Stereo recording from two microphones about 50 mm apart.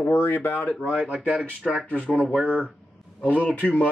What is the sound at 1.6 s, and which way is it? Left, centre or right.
Speech, centre.